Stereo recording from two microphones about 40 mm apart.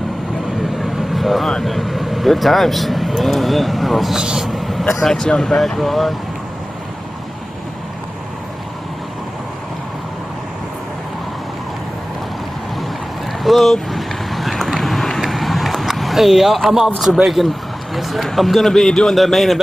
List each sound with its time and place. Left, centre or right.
0.6 s vehicle: centre
1.5 s speech: centre
4.1 s speech: centre
4.4 s vehicle: centre
5.2 s speech: centre
13.4 s vehicle: centre
14.8 s a sound: centre
17.2 s speech: centre